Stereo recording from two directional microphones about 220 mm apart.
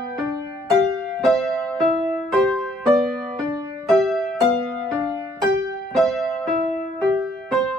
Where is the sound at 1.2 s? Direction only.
5° left (ahead or behind).